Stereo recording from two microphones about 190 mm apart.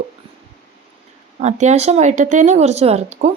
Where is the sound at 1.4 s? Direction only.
35° right (ahead or behind).